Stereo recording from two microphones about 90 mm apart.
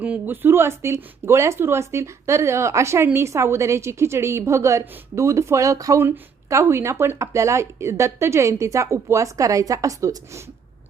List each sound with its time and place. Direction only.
0.0 s speech: 20° right (ahead or behind); by 10.4 s 35° right (ahead or behind)